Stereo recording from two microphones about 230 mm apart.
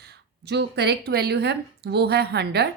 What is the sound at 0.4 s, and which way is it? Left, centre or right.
A woman's voice, right.